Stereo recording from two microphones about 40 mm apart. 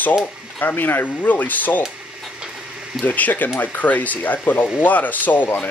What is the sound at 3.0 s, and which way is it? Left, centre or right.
Speech, left.